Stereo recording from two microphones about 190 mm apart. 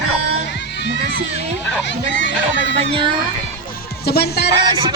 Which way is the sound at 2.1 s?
70° left (ahead or behind).